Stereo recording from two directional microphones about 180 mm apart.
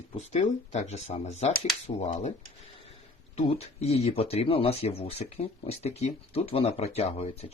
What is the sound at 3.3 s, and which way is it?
Speech, 35° left (ahead or behind).